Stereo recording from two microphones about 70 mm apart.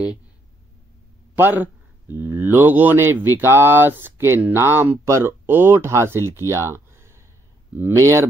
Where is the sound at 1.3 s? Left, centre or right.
Right.